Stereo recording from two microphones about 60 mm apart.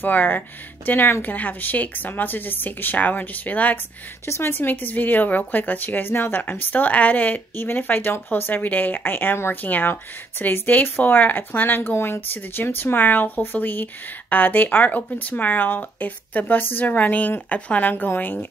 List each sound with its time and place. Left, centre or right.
0.0 s a woman's voice: left
4.3 s a woman's voice: left